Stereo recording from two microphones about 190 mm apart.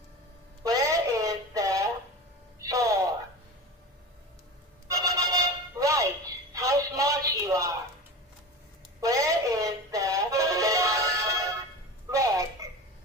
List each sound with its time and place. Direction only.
0.7 s radio: 15° right (ahead or behind)
2.6 s a sound: 15° right (ahead or behind)
4.8 s telephone bell ringing: 15° right (ahead or behind)
9.0 s music: 15° right (ahead or behind)